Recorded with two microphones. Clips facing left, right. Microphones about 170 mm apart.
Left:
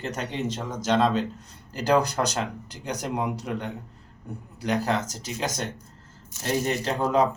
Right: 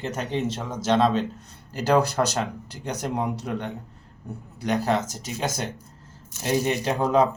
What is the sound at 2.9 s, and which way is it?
Speech, 10° left (ahead or behind).